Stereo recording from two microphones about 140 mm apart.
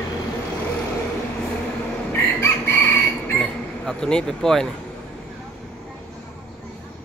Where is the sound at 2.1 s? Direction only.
15° left (ahead or behind).